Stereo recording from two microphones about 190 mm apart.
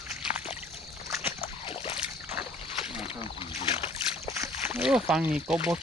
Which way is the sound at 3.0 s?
30° left (ahead or behind).